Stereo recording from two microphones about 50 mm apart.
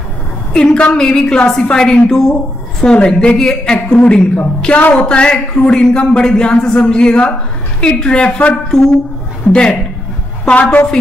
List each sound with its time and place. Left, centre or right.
0.5 s a woman's voice: left
10.4 s a woman's voice: left